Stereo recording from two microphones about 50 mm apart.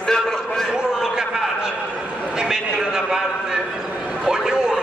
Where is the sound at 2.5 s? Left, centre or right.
Centre.